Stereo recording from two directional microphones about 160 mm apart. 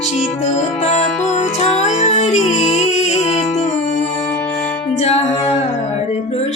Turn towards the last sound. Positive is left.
turn(degrees=40)  # may be behind; listen again after turning